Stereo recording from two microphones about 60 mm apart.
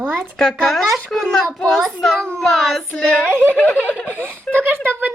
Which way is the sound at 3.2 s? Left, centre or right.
Right.